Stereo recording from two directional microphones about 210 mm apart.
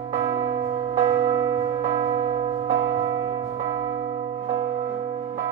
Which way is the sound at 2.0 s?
30° right (ahead or behind).